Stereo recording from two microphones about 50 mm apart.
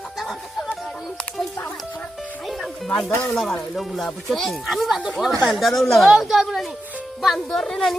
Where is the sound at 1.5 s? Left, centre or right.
Left.